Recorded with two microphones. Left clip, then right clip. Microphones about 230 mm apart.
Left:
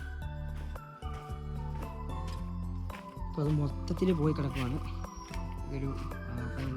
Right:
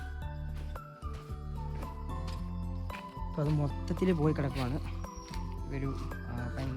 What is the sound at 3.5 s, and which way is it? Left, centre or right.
Speech, centre.